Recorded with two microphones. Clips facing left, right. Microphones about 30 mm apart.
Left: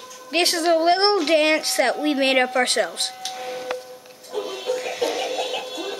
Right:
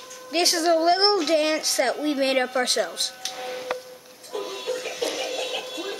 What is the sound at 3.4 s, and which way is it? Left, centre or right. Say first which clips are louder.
Music: left 1 dB; centre.